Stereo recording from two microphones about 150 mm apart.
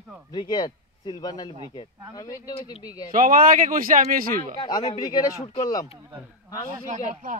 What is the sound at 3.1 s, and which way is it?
Speech, 65° right (ahead or behind).